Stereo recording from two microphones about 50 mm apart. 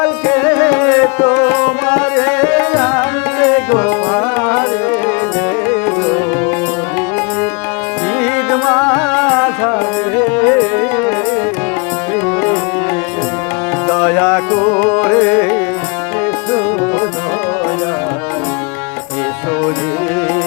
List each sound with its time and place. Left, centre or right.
0.0 s tabla: left
5.6 s music: left
8.2 s music: left
13.8 s music: left